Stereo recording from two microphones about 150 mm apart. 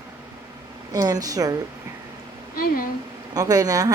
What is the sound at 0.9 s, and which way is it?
Speech, 25° right (ahead or behind).